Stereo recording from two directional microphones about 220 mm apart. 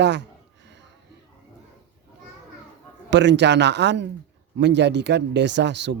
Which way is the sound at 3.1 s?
55° right (ahead or behind).